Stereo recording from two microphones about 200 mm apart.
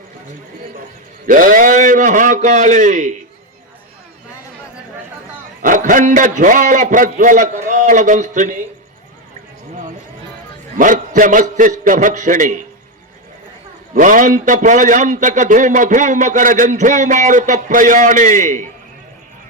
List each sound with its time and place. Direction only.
1.3 s a man's voice: 45° right (ahead or behind)
5.6 s a man's voice: 40° right (ahead or behind)
10.8 s a man's voice: 40° right (ahead or behind)
13.9 s a man's voice: 40° right (ahead or behind)